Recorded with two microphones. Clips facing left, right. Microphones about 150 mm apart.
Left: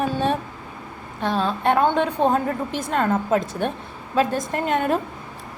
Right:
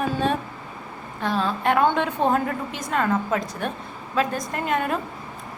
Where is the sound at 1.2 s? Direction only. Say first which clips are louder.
Left 2 dB; 25° left (ahead or behind).